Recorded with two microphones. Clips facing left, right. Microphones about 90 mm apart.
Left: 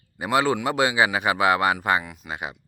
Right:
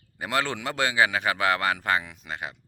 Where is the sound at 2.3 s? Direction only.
15° left (ahead or behind).